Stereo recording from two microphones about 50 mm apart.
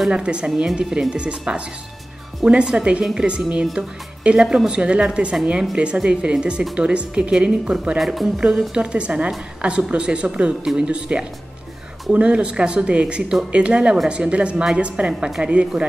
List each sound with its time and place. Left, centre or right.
0.1 s speech: right
8.0 s speech: centre
8.4 s speech: centre
10.6 s speech: centre
12.1 s speech: right
15.2 s speech: centre